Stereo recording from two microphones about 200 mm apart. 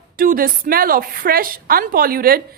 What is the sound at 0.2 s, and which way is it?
A woman's voice, 45° right (ahead or behind).